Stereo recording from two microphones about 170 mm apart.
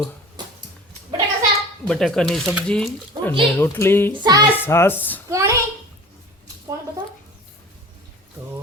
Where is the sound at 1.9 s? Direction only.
5° left (ahead or behind).